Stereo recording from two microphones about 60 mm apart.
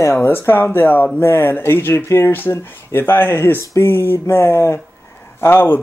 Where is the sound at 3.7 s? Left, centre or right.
Left.